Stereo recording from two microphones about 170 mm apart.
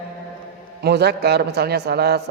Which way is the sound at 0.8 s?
75° right (ahead or behind).